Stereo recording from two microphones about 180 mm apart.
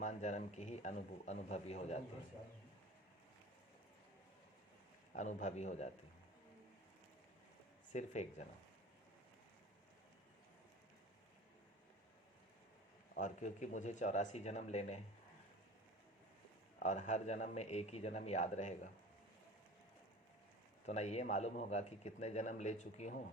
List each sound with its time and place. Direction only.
0.0 s a man's voice: 40° left (ahead or behind)
5.1 s a man's voice: 40° left (ahead or behind)
7.9 s a man's voice: 40° left (ahead or behind)
13.1 s a man's voice: 45° left (ahead or behind)
16.8 s a man's voice: 40° left (ahead or behind)
20.8 s a man's voice: 40° left (ahead or behind)